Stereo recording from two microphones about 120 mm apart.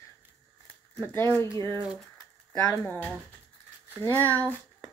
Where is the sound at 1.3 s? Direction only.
25° left (ahead or behind).